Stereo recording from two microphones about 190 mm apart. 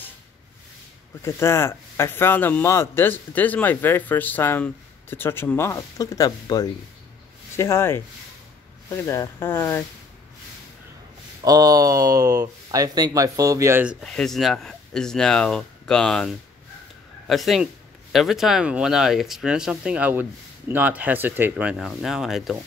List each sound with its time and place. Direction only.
1.2 s speech: 15° left (ahead or behind)
11.4 s speech: 20° right (ahead or behind)
14.0 s speech: centre (ahead or behind)